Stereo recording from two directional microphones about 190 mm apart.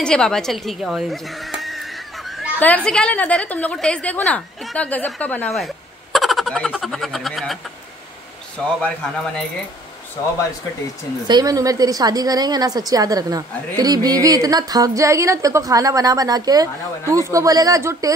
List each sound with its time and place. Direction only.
0.0 s speech: 5° left (ahead or behind)
6.1 s a sound: centre (ahead or behind)
8.5 s a man's voice: 5° left (ahead or behind)
11.2 s a woman's voice: 20° right (ahead or behind)